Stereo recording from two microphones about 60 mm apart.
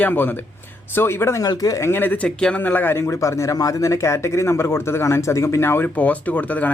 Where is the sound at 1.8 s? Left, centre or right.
Left.